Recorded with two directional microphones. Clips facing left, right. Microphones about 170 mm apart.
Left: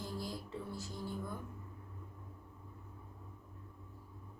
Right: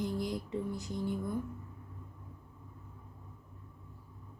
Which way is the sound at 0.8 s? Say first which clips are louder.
Right 7 dB; 20° right (ahead or behind).